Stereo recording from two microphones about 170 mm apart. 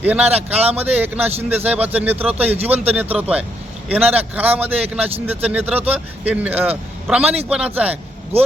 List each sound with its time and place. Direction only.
0.0 s speech: 10° right (ahead or behind)
8.3 s speech: 35° right (ahead or behind)